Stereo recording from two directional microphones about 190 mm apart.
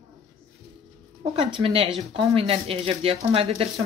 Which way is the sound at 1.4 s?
30° right (ahead or behind).